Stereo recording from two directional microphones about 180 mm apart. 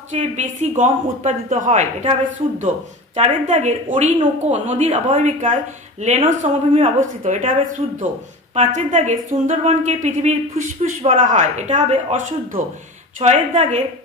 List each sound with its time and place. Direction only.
0.1 s speech: 40° right (ahead or behind)